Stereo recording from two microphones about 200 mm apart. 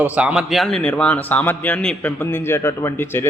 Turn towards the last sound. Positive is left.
turn(degrees=10)  # may be behind; listen again after turning